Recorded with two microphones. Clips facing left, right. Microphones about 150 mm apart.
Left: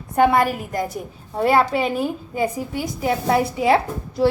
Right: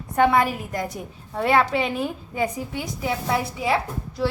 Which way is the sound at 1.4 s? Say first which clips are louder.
Left 3 dB; 40° left (ahead or behind).